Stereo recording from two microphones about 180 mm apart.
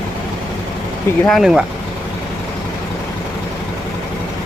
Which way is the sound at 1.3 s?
Centre (ahead or behind).